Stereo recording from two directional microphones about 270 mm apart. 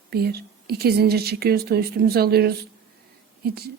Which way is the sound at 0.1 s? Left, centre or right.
Right.